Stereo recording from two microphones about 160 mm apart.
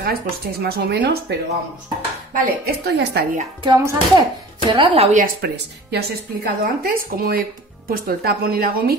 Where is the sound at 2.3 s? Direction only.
75° right (ahead or behind); by 3.2 s 90° right.